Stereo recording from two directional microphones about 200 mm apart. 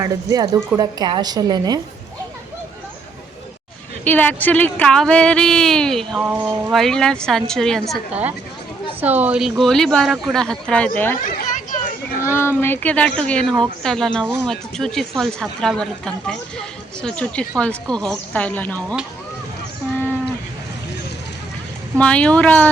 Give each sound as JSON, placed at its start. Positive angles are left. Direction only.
{"t": 0.0, "sound": "a woman's voice", "side_deg": -20}
{"t": 4.0, "sound": "a woman's voice", "side_deg": 10}
{"t": 11.3, "sound": "children playing", "side_deg": 40}
{"t": 12.3, "sound": "a woman's voice", "side_deg": 10}
{"t": 21.9, "sound": "a woman's voice", "side_deg": 5}